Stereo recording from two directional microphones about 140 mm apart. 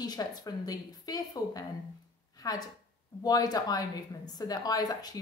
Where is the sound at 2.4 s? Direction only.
25° left (ahead or behind).